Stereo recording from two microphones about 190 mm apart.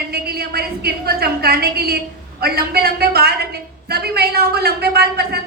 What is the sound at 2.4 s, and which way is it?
A man's voice, 55° right (ahead or behind).